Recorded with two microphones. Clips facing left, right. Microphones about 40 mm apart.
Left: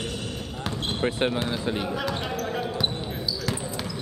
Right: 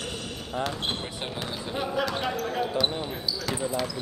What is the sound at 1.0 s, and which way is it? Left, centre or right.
Speech, left.